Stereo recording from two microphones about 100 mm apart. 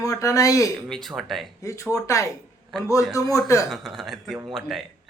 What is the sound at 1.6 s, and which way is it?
Speech, 30° left (ahead or behind).